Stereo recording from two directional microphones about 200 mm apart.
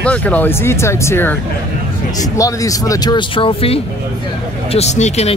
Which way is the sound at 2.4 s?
15° left (ahead or behind).